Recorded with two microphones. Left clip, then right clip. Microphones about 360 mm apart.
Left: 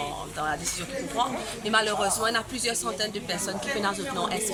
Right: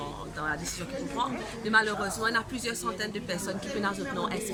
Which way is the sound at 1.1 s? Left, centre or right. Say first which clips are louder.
Left 4 dB; centre.